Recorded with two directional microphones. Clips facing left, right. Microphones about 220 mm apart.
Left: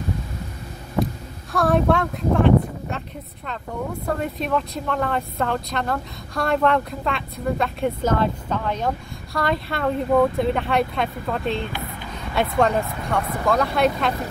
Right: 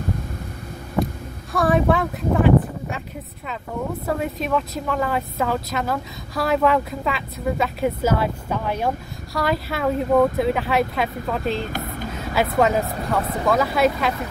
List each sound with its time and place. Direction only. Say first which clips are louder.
1.5 s speech: even; centre (ahead or behind)
4.2 s speech: right 1 dB; centre (ahead or behind)
11.6 s a sound: right 3 dB; 45° right (ahead or behind)
12.5 s speech: right 1 dB; 5° right (ahead or behind)